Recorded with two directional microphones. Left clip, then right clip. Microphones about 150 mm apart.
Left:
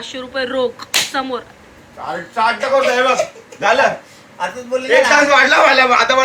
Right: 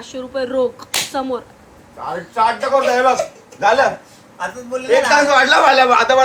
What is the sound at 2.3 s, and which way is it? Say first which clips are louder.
Speech: left 1 dB; 15° right (ahead or behind).